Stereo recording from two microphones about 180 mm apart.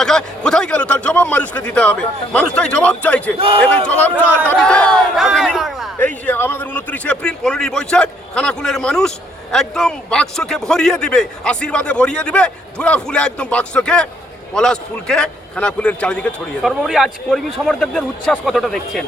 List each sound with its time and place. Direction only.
0.0 s a man's voice: 5° left (ahead or behind)
3.3 s a man's voice: 30° right (ahead or behind)
4.4 s speech: 5° left (ahead or behind)
6.2 s a man's voice: 10° left (ahead or behind)